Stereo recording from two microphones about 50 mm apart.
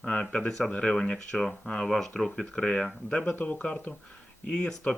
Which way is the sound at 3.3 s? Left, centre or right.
Left.